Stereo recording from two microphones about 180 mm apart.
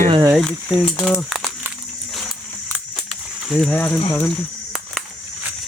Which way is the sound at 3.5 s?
Centre (ahead or behind).